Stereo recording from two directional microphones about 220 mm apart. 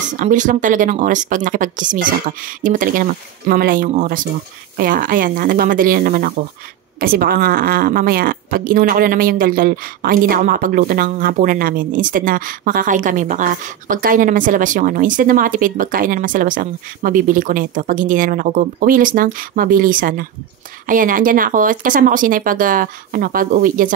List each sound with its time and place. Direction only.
0.2 s speech: 35° right (ahead or behind)